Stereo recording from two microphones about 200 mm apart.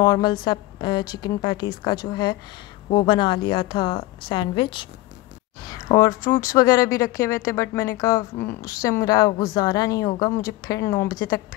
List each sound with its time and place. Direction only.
0.0 s a woman's voice: 20° left (ahead or behind)